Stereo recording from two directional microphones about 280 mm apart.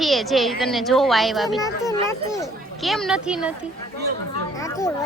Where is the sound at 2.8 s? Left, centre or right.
Centre.